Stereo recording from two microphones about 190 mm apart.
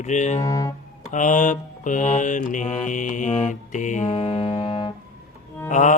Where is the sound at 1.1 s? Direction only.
40° left (ahead or behind).